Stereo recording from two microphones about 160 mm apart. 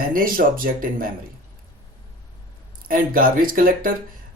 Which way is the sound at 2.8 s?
65° right (ahead or behind).